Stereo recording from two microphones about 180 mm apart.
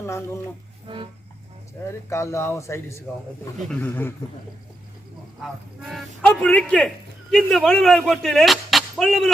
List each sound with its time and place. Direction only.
0.9 s music: 30° right (ahead or behind)
1.9 s speech: 15° left (ahead or behind)
5.4 s a man's voice: centre (ahead or behind)